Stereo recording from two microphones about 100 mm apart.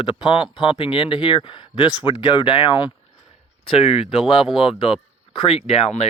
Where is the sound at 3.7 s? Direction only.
75° left (ahead or behind).